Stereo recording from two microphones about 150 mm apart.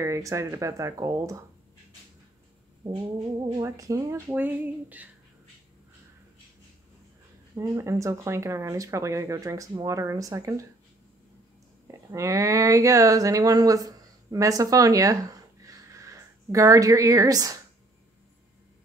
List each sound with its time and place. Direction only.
0.0 s speech: 20° right (ahead or behind)
2.8 s cat: 45° right (ahead or behind)
3.6 s speech: 20° right (ahead or behind)
7.5 s speech: 20° right (ahead or behind)
11.9 s speech: 20° right (ahead or behind)
15.6 s a sound: 20° right (ahead or behind)